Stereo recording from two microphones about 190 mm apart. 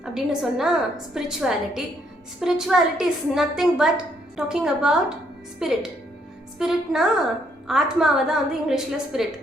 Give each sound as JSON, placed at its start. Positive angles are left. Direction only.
{"t": 0.0, "sound": "a woman's voice", "side_deg": -5}